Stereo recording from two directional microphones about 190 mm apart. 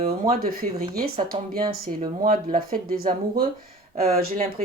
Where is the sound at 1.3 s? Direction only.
30° right (ahead or behind).